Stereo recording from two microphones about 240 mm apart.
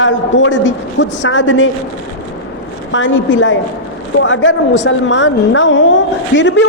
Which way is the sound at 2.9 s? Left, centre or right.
Left.